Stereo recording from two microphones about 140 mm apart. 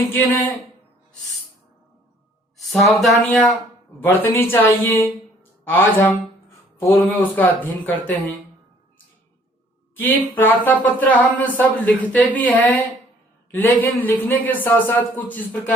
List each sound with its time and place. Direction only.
2.6 s speech: centre (ahead or behind)
4.1 s speech: 15° left (ahead or behind)
9.9 s speech: 15° left (ahead or behind)